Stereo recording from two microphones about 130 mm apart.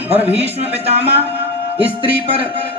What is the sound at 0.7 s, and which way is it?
Speech, 50° right (ahead or behind).